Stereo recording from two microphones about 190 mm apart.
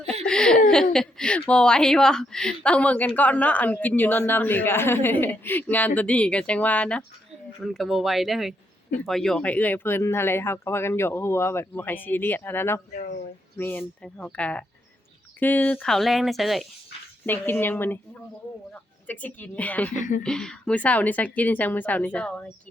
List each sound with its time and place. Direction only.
0.1 s laughter: 5° left (ahead or behind)
0.7 s speech: 5° left (ahead or behind)
17.2 s speech: 10° left (ahead or behind)
20.0 s speech: 40° left (ahead or behind)
20.2 s speech: 5° left (ahead or behind)